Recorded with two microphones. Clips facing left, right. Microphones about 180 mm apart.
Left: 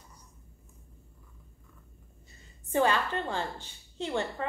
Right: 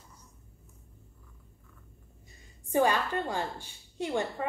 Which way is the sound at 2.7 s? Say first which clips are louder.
Right 1 dB; 10° right (ahead or behind).